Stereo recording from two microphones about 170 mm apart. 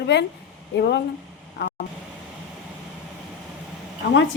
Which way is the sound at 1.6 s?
80° left.